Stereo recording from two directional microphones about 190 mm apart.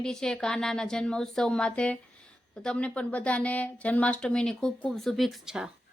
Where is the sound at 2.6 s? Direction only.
5° left (ahead or behind).